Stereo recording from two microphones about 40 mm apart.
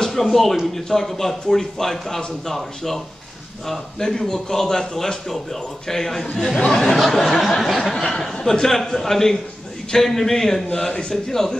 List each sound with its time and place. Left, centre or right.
0.0 s a man's voice: centre
2.4 s a sound: centre
3.6 s a man's voice: centre
6.3 s a sound: centre
7.9 s a man's voice: centre
10.7 s a man's voice: left